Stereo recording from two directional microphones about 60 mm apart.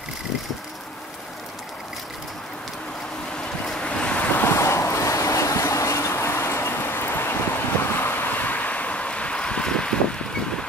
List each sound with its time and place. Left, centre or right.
3.6 s vehicle: centre
4.6 s waves: left
5.7 s vehicle: left; by 10.6 s centre